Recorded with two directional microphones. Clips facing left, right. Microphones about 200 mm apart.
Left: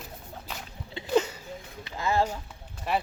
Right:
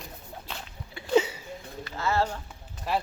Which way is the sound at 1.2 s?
10° right (ahead or behind).